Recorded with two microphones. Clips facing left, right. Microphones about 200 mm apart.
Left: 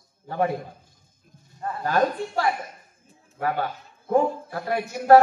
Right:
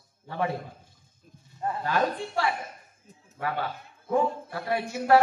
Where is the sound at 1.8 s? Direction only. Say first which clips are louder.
Left 5 dB; 40° left (ahead or behind).